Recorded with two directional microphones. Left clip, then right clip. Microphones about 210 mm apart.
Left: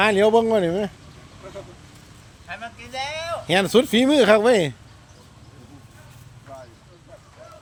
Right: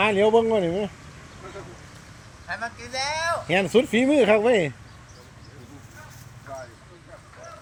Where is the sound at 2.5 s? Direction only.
10° right (ahead or behind).